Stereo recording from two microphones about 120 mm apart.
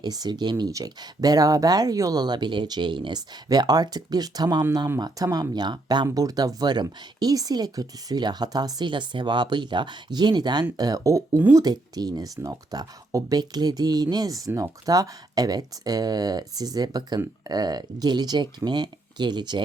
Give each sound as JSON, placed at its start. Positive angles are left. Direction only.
{"t": 0.0, "sound": "speech", "side_deg": -35}